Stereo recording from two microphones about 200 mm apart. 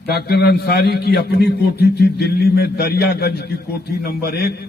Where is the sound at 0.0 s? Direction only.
55° left (ahead or behind).